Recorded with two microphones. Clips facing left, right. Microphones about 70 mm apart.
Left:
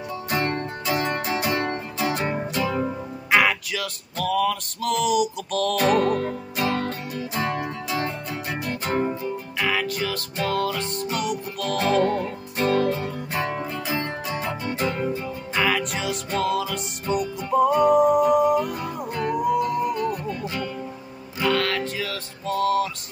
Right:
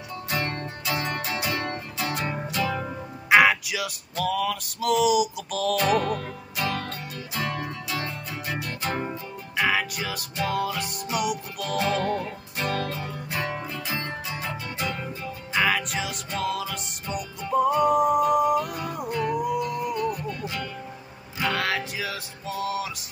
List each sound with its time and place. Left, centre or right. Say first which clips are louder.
0.3 s music: left 4 dB; left
1.6 s music: left 4 dB; centre
2.0 s music: left 5 dB; left
3.3 s music: right 2 dB; centre
7.3 s music: left 3 dB; centre
8.8 s music: left 5 dB; centre
9.6 s music: even; centre
12.7 s music: left 7 dB; centre
15.5 s music: left 1 dB; centre
21.4 s music: left 3 dB; centre